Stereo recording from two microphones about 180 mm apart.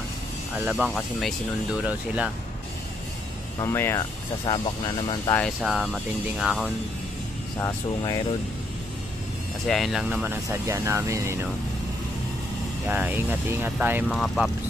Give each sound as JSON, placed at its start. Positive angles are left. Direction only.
{"t": 0.7, "sound": "speech", "side_deg": -5}
{"t": 3.5, "sound": "speech", "side_deg": 15}
{"t": 4.5, "sound": "speech", "side_deg": 30}
{"t": 5.6, "sound": "speech", "side_deg": 0}
{"t": 7.6, "sound": "speech", "side_deg": 20}
{"t": 9.7, "sound": "speech", "side_deg": 0}
{"t": 10.5, "sound": "speech", "side_deg": -15}
{"t": 12.8, "sound": "speech", "side_deg": -10}
{"t": 14.0, "sound": "speech", "side_deg": 0}